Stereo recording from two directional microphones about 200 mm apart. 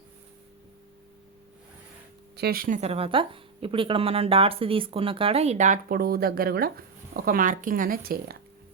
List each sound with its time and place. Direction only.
2.3 s speech: 50° right (ahead or behind)